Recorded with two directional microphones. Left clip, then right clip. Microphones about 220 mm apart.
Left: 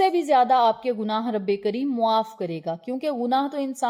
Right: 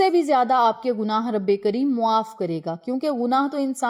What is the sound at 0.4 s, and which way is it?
A woman's voice, 25° right (ahead or behind).